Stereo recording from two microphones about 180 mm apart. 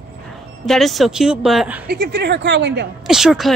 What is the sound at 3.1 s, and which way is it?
Speech, centre (ahead or behind).